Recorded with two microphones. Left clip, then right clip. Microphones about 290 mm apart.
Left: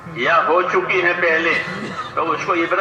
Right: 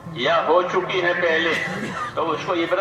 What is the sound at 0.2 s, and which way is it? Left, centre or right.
A man's voice, right.